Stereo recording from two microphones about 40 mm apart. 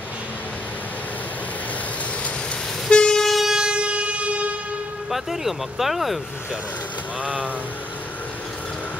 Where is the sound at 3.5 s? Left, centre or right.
Right.